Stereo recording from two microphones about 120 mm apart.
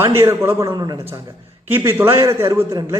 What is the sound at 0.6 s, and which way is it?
Speech, 30° right (ahead or behind).